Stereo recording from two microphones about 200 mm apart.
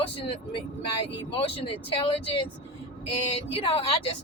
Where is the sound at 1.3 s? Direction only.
25° left (ahead or behind).